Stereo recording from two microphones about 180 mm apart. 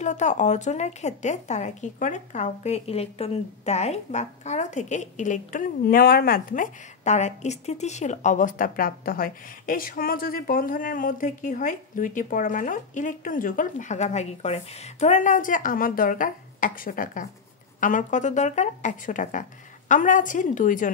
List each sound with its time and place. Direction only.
0.0 s a woman's voice: 40° left (ahead or behind)